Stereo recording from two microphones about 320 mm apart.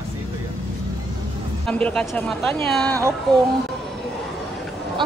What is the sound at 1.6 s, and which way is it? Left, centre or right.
Speech, centre.